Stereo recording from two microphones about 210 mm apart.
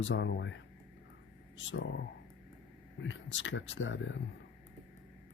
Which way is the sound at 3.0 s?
60° left (ahead or behind).